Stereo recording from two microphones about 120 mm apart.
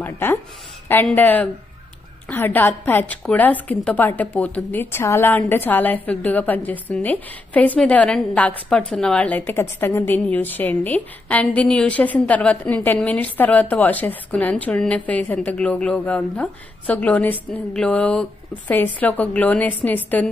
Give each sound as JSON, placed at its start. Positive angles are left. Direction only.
{"t": 0.0, "sound": "a woman's voice", "side_deg": 15}